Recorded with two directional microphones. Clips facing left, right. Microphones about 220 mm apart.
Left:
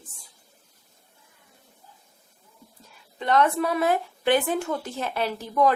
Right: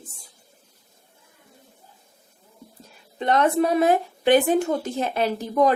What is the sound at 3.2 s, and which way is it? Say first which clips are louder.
A woman's voice: right 2 dB; 20° right (ahead or behind).